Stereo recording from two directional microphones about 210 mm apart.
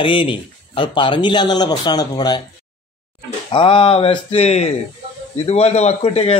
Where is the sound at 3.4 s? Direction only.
25° left (ahead or behind).